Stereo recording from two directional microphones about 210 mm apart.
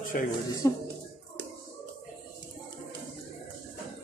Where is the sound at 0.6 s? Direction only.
15° left (ahead or behind).